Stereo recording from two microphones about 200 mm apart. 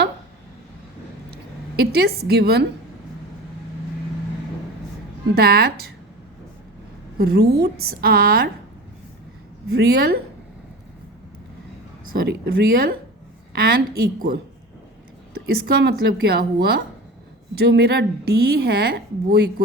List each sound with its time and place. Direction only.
1.3 s speech: 50° right (ahead or behind)
5.3 s a woman's voice: 50° right (ahead or behind)
7.2 s a woman's voice: 50° right (ahead or behind)
9.6 s a woman's voice: 50° right (ahead or behind)
12.1 s a woman's voice: 55° right (ahead or behind)
15.4 s a woman's voice: 50° right (ahead or behind)